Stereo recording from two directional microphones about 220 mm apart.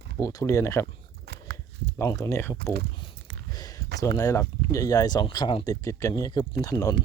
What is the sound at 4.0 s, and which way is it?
Speech, 15° left (ahead or behind).